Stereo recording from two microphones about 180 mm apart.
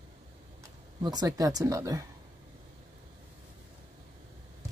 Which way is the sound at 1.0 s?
20° right (ahead or behind).